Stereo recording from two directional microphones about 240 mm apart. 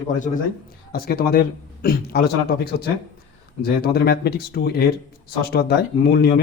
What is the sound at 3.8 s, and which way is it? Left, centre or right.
A man's voice, left.